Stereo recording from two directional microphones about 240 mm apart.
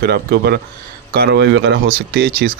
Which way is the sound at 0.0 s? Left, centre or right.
Right.